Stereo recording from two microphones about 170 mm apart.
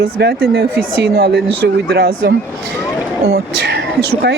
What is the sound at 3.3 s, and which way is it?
Speech, 80° right.